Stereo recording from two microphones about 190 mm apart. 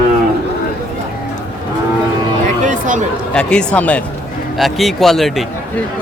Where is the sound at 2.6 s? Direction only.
40° right (ahead or behind).